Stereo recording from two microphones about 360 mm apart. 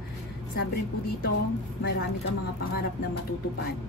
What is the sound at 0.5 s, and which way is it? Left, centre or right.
Speech, left.